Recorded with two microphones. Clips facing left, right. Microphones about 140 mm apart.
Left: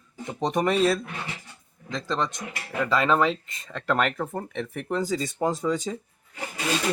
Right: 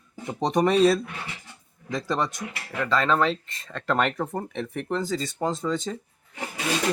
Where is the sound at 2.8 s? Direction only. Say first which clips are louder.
Left 1 dB; 5° left (ahead or behind).